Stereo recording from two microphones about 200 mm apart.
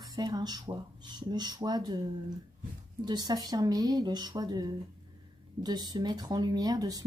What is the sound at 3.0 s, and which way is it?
A woman's voice, 20° right (ahead or behind).